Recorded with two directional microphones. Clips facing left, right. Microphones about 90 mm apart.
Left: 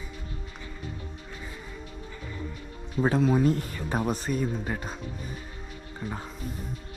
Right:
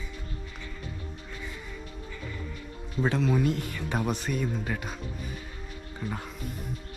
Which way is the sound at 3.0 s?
45° left (ahead or behind).